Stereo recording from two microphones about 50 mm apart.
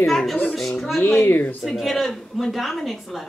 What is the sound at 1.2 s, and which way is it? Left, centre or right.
Speech, left.